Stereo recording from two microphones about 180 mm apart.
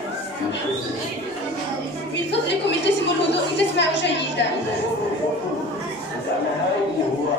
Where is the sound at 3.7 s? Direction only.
75° left (ahead or behind).